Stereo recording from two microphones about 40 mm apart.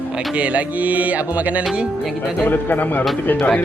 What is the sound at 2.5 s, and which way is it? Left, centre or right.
Speech, left.